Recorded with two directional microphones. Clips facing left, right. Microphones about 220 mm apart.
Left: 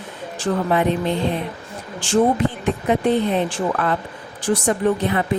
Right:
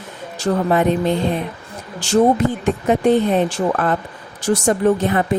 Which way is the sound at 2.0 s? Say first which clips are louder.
Right 3 dB; 40° right (ahead or behind).